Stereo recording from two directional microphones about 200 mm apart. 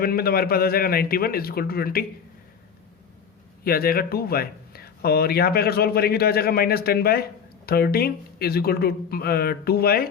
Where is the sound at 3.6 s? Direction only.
50° left (ahead or behind).